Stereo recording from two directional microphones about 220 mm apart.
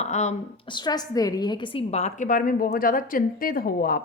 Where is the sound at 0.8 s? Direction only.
20° left (ahead or behind).